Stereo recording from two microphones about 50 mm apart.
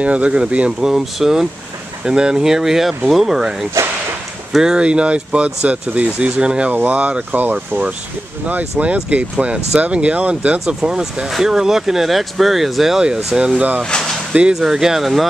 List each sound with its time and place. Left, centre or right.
0.0 s speech: right
0.7 s speech: centre
10.8 s speech: centre
13.0 s speech: centre
13.8 s a sound: centre
14.5 s speech: centre